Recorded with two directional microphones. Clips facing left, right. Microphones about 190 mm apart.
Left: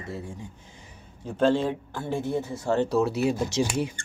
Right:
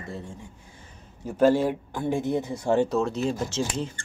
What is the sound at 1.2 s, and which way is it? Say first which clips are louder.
Speech: right 2 dB; 10° right (ahead or behind).